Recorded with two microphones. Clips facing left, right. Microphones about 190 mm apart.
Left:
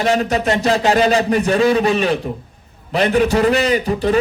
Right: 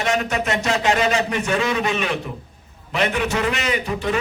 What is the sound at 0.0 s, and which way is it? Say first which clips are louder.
A man's voice: left 5 dB; 35° left (ahead or behind).